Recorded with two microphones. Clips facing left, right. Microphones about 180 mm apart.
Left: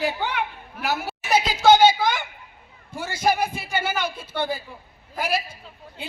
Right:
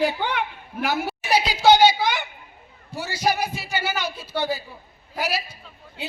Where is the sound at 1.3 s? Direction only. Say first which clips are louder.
Even; 50° left (ahead or behind).